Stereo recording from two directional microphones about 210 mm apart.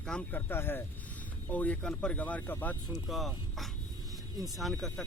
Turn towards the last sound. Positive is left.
turn(degrees=0)  # may be behind; listen again after turning